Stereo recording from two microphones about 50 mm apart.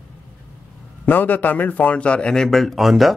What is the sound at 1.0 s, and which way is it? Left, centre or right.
A man's voice, left.